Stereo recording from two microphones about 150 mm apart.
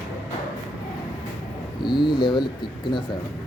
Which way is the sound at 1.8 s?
30° left (ahead or behind).